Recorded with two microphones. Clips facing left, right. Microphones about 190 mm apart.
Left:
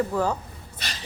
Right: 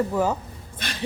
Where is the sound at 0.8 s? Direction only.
55° right (ahead or behind).